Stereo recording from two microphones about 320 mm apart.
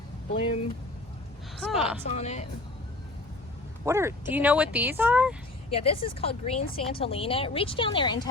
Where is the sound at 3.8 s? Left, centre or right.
Centre.